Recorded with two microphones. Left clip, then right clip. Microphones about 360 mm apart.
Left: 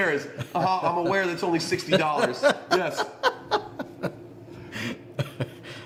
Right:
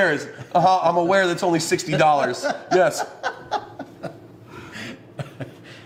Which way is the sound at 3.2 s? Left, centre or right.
Left.